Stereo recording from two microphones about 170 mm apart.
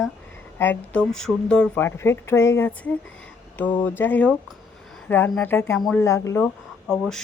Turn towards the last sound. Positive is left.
turn(degrees=5)  # may be behind; listen again after turning